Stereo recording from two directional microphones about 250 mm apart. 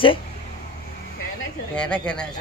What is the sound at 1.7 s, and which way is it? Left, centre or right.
Speech, centre.